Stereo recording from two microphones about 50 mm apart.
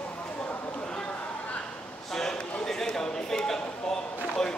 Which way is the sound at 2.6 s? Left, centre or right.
Centre.